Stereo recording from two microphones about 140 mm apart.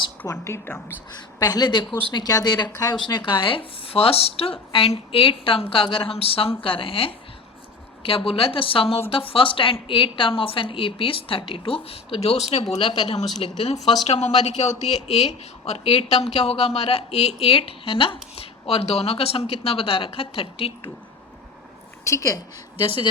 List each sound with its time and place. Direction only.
0.3 s speech: 20° left (ahead or behind)
1.4 s a woman's voice: 30° left (ahead or behind); by 20.9 s 45° left (ahead or behind)
22.0 s a woman's voice: 20° left (ahead or behind)